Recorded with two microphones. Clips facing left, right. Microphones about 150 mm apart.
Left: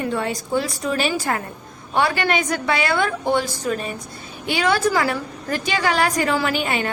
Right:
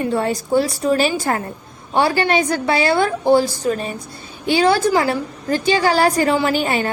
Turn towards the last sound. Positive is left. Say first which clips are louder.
# right 4 dB
turn(degrees=-35)  # may be behind; listen again after turning